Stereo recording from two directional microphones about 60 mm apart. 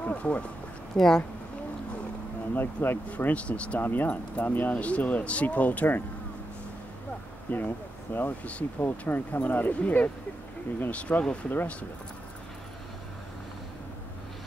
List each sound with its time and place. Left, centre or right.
0.0 s speech: left
0.9 s speech: centre
2.5 s speech: left
3.1 s speech: left
7.5 s speech: left
8.3 s speech: left